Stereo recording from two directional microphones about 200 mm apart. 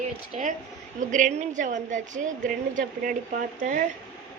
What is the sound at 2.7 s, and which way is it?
Speech, 45° right (ahead or behind).